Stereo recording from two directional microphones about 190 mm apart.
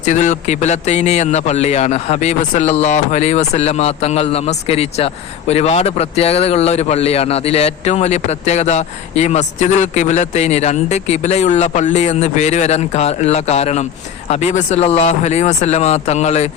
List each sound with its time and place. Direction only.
0.0 s a man's voice: 40° left (ahead or behind)